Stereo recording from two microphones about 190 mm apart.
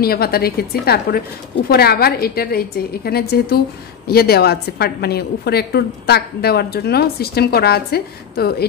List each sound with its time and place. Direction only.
0.0 s a woman's voice: 55° left (ahead or behind)